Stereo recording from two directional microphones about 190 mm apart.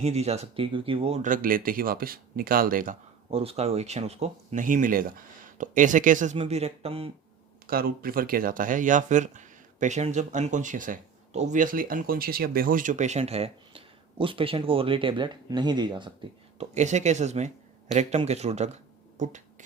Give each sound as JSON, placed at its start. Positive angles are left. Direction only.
{"t": 0.0, "sound": "speech", "side_deg": -35}
{"t": 3.2, "sound": "speech", "side_deg": -30}
{"t": 6.3, "sound": "speech", "side_deg": -30}
{"t": 7.7, "sound": "speech", "side_deg": -50}
{"t": 16.6, "sound": "speech", "side_deg": -40}